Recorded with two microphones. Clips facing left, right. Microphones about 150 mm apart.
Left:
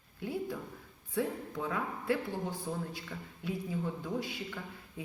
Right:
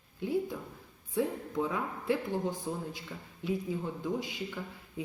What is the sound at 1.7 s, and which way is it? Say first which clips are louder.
Speech: right 1 dB; 20° right (ahead or behind).